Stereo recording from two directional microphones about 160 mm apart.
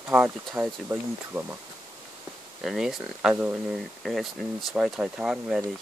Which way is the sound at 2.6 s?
Centre (ahead or behind).